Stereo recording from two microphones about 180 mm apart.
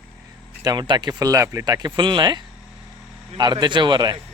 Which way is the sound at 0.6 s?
25° right (ahead or behind).